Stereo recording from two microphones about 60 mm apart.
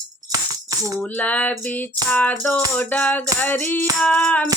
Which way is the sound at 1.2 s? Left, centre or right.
Left.